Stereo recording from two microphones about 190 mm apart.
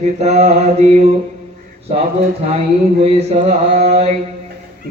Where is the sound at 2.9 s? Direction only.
30° right (ahead or behind).